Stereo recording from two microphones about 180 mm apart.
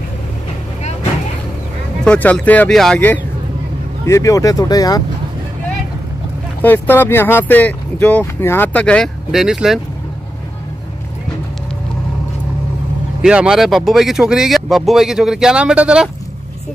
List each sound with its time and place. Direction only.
2.0 s speech: 5° left (ahead or behind)
6.6 s speech: 10° left (ahead or behind)
13.2 s speech: 5° right (ahead or behind)